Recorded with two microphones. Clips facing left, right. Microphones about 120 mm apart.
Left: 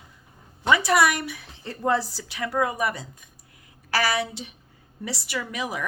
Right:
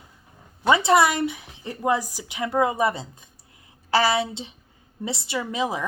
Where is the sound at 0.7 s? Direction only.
25° right (ahead or behind).